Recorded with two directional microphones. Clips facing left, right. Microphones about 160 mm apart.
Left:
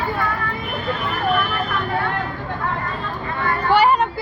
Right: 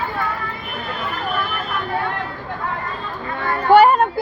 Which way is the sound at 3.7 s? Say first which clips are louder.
Right 5 dB; 50° right (ahead or behind).